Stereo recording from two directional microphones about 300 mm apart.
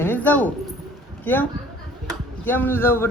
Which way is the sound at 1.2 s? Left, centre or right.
Centre.